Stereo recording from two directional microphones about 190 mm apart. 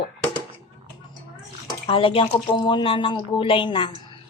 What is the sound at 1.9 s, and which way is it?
A woman's voice, 30° left (ahead or behind).